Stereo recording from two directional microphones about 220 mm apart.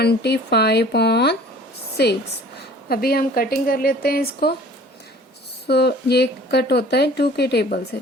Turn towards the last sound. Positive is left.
turn(degrees=50)  # may be behind; listen again after turning